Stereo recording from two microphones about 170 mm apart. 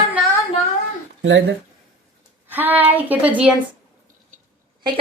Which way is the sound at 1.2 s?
90° right.